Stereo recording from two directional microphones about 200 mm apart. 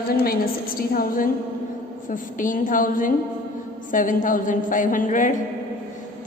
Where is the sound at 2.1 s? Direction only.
40° left (ahead or behind).